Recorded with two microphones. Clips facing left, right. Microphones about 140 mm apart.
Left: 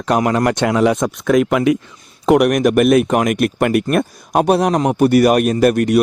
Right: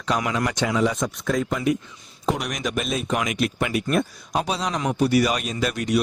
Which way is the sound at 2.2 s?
70° left (ahead or behind).